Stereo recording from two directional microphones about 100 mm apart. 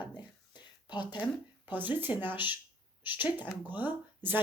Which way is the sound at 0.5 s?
45° left (ahead or behind).